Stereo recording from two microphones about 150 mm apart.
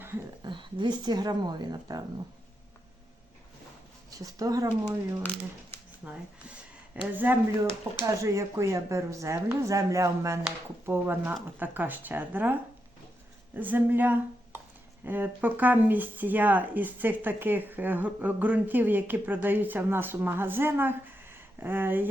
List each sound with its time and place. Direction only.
0.4 s speech: 30° right (ahead or behind)
4.1 s speech: 25° right (ahead or behind)
6.0 s speech: 10° right (ahead or behind)
13.6 s speech: 10° right (ahead or behind)